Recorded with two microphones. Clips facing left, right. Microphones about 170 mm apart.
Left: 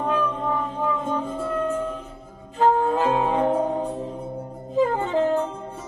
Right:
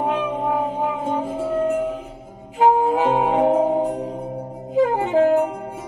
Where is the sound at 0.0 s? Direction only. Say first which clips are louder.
Right 2 dB; 15° right (ahead or behind).